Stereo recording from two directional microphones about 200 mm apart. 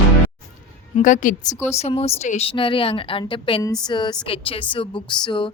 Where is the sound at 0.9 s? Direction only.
40° left (ahead or behind).